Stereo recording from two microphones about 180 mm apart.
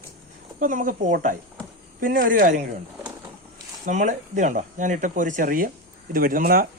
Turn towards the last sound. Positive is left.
turn(degrees=-50)  # may be behind; listen again after turning